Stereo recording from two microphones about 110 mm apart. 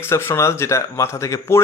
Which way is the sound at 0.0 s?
25° left (ahead or behind).